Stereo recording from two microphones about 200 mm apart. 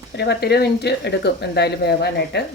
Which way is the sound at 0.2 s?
55° left (ahead or behind).